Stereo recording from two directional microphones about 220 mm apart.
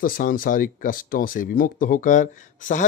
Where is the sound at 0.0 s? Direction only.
40° left (ahead or behind).